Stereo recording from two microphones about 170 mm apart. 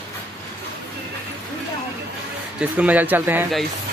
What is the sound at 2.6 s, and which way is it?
Speech, 10° right (ahead or behind).